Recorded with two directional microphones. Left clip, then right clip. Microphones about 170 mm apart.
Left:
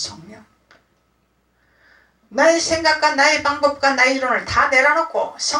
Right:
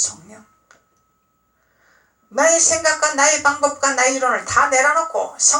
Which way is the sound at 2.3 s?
30° right (ahead or behind).